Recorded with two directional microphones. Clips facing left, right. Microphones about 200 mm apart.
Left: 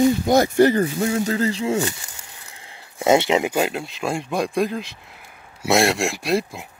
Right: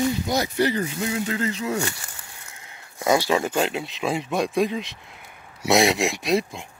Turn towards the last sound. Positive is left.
turn(degrees=0)  # may be behind; listen again after turning